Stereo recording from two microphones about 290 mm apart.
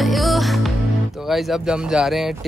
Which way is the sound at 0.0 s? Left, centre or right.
Centre.